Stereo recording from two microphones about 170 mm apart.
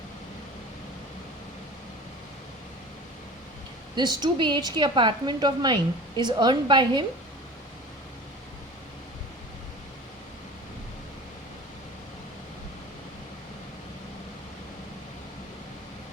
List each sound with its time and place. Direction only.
3.9 s a woman's voice: 25° right (ahead or behind)